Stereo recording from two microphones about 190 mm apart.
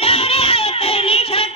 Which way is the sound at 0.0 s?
30° left (ahead or behind).